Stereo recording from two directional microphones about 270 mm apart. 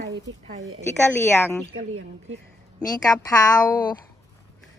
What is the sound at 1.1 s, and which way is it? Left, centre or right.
Speech, centre.